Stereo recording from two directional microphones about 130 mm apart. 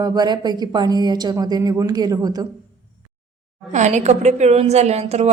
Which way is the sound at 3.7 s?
65° right (ahead or behind).